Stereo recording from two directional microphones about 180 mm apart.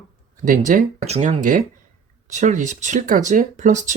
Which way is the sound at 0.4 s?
50° right (ahead or behind).